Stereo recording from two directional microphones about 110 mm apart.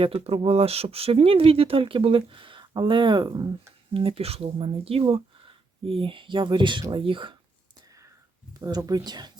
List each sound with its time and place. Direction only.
0.0 s speech: 55° right (ahead or behind); by 3.5 s 40° right (ahead or behind)
3.9 s speech: 60° right (ahead or behind)
8.5 s speech: 35° right (ahead or behind)